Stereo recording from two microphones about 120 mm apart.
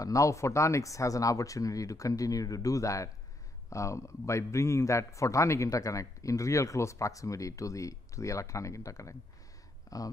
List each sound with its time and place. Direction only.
0.0 s a man's voice: 25° left (ahead or behind)